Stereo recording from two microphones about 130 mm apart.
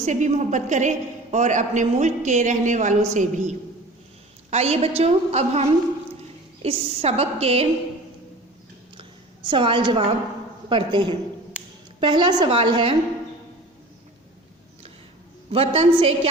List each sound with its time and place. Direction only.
0.0 s a woman's voice: 65° right (ahead or behind)
4.5 s a woman's voice: 50° right (ahead or behind)
9.0 s a sound: 40° right (ahead or behind)
10.7 s a woman's voice: 40° right (ahead or behind)
15.5 s a woman's voice: 50° right (ahead or behind)